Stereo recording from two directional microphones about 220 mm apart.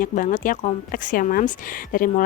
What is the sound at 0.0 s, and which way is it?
A woman's voice, 35° left (ahead or behind).